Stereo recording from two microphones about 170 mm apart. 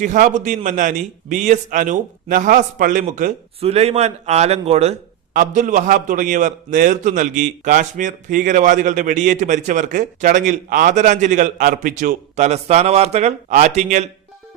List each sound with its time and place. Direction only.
0.0 s a man's voice: 50° right (ahead or behind)
3.6 s a man's voice: 40° right (ahead or behind)
5.3 s a man's voice: 50° right (ahead or behind)